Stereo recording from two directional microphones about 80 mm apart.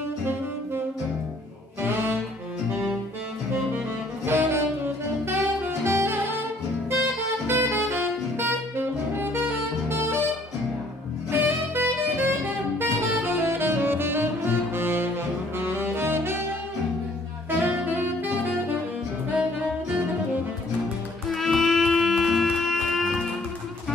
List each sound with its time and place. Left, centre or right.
2.7 s music: right
4.3 s saxophone: right
7.4 s saxophone: right
11.7 s saxophone: right
17.5 s saxophone: right
21.3 s music: centre